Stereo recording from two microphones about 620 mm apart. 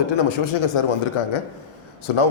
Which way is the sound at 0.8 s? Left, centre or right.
Left.